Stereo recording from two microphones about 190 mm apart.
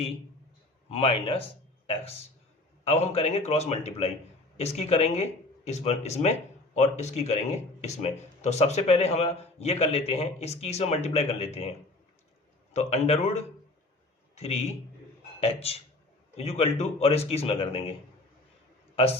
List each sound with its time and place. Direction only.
0.9 s speech: 30° left (ahead or behind)
2.8 s speech: 35° left (ahead or behind)
12.7 s a man's voice: 35° left (ahead or behind)